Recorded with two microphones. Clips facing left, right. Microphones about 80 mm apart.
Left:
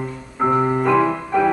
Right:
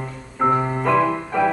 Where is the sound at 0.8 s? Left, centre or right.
Centre.